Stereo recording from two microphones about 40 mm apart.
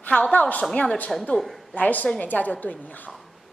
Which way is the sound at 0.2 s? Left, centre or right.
Left.